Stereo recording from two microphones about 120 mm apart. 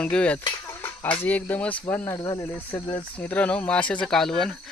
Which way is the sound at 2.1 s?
25° left (ahead or behind).